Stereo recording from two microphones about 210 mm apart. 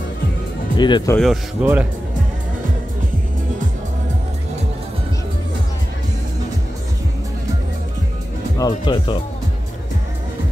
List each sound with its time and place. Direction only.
0.7 s speech: 20° left (ahead or behind)
1.1 s speech: centre (ahead or behind)
8.5 s speech: 20° left (ahead or behind)